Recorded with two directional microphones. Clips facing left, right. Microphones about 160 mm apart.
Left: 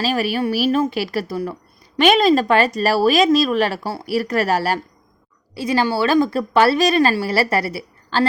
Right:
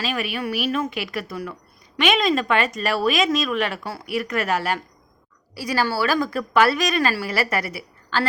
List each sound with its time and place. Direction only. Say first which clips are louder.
0.0 s speech: left 6 dB; 35° left (ahead or behind)
5.5 s speech: left 4 dB; 25° left (ahead or behind)